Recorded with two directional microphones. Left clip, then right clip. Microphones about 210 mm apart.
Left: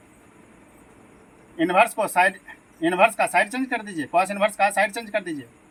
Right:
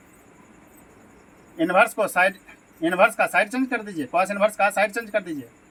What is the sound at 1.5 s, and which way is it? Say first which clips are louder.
Speech: even; 10° right (ahead or behind).